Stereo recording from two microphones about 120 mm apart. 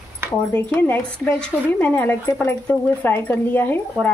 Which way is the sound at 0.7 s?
15° left (ahead or behind).